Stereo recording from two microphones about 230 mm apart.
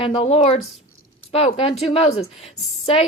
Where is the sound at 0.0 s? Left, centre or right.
Left.